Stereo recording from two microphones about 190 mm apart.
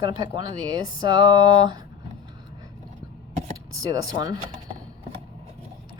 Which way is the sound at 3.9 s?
20° right (ahead or behind).